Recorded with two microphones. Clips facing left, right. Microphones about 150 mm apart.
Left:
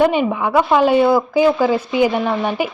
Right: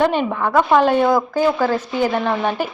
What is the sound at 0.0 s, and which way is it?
A woman's voice, 10° left (ahead or behind).